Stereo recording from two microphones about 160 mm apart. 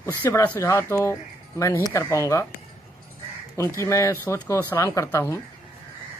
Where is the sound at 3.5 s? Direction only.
15° left (ahead or behind).